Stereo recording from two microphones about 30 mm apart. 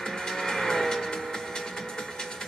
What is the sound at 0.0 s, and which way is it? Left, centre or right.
Music, centre.